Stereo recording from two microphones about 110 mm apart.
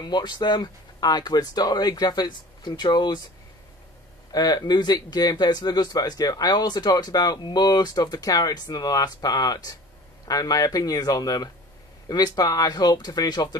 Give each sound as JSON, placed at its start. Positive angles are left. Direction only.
{"t": 0.0, "sound": "speech", "side_deg": 40}
{"t": 4.3, "sound": "speech", "side_deg": 40}